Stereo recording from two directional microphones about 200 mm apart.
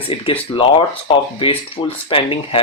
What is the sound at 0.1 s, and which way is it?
Speech, 25° left (ahead or behind).